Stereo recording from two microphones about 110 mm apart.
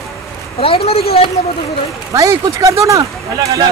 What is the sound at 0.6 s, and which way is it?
Speech, 60° left (ahead or behind).